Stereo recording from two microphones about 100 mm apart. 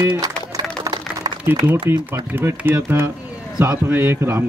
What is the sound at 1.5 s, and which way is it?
Speech, 20° right (ahead or behind).